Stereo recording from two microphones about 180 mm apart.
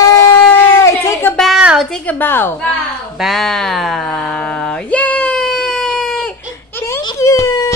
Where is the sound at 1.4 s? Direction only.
5° right (ahead or behind).